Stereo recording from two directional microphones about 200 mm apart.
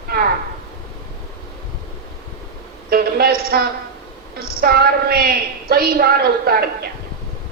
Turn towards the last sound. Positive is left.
turn(degrees=-50)  # may be behind; listen again after turning